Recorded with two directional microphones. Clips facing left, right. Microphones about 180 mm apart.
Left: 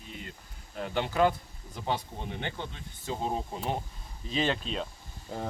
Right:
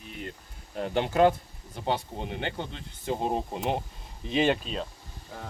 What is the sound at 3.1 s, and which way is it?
Speech, 15° right (ahead or behind).